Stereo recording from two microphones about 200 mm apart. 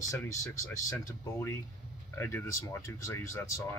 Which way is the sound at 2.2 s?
10° left (ahead or behind).